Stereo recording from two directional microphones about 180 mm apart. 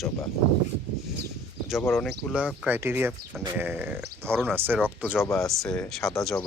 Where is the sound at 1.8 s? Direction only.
10° left (ahead or behind).